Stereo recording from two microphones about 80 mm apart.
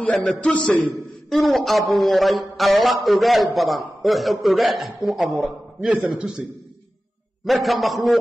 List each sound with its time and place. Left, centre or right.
0.1 s a man's voice: centre
0.4 s a man's voice: centre
1.3 s a man's voice: centre
7.4 s a man's voice: centre